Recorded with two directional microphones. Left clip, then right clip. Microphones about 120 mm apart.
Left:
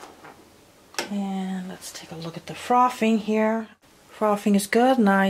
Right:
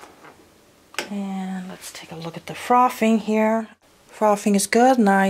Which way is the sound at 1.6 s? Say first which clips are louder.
Right 1 dB; 15° right (ahead or behind).